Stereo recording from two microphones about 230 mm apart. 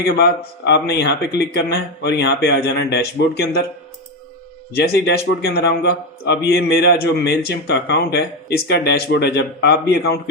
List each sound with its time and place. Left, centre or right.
0.0 s a man's voice: left
4.7 s a man's voice: left